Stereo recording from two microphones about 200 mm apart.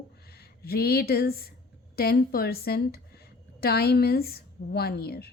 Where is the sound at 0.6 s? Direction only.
50° left (ahead or behind).